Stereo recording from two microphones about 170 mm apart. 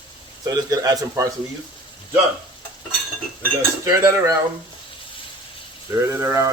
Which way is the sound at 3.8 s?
15° right (ahead or behind).